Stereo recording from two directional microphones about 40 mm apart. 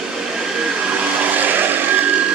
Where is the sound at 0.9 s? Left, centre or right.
Right.